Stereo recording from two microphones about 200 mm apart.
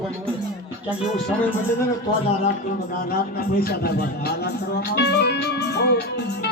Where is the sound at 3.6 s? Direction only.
50° left (ahead or behind).